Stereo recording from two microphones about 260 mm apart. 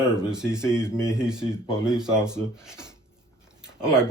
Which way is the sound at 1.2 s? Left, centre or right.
Centre.